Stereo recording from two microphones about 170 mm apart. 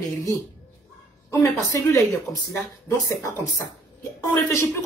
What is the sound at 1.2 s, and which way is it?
Speech, 20° left (ahead or behind).